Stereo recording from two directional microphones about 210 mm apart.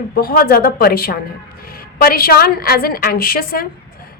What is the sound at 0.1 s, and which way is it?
A woman's voice, 45° left (ahead or behind).